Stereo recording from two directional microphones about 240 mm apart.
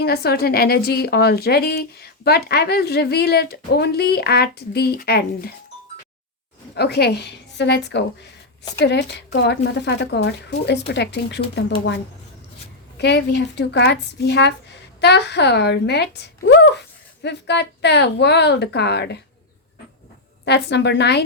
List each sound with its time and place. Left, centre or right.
0.0 s a woman's voice: left
6.7 s speech: left
13.0 s speech: left
20.4 s speech: left